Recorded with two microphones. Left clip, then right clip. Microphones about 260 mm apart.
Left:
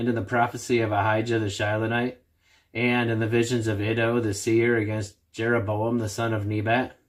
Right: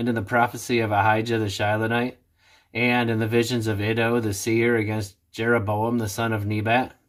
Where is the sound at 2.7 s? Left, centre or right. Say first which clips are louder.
Right 2 dB; right.